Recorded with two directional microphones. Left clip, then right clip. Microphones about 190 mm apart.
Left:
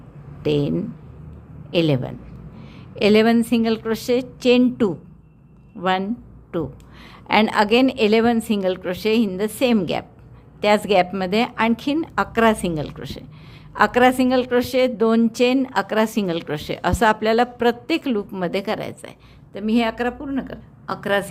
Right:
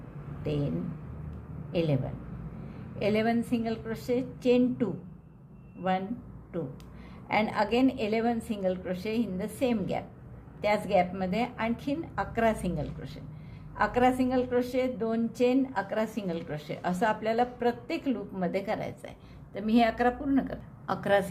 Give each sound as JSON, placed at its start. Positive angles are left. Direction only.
{"t": 0.4, "sound": "a woman's voice", "side_deg": 50}
{"t": 1.7, "sound": "a woman's voice", "side_deg": 50}
{"t": 7.3, "sound": "a woman's voice", "side_deg": 45}